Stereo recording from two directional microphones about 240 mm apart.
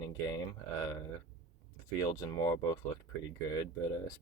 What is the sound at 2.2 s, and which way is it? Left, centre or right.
Speech, centre.